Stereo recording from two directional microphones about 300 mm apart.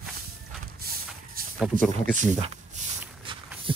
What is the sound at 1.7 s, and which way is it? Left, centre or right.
Speech, right.